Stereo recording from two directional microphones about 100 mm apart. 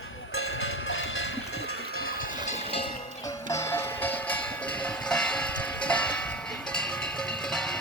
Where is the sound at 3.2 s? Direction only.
30° left (ahead or behind); by 7.7 s 5° left (ahead or behind).